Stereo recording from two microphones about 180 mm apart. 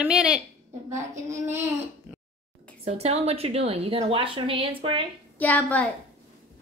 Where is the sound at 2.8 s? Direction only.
35° right (ahead or behind).